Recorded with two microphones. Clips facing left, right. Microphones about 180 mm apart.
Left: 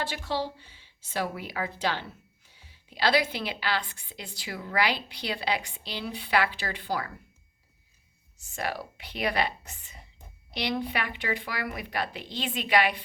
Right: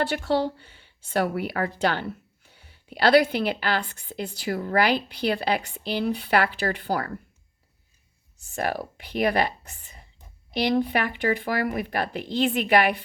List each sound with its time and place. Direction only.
0.1 s a woman's voice: 55° right (ahead or behind)
8.5 s a woman's voice: 45° right (ahead or behind)
10.6 s a woman's voice: 50° right (ahead or behind)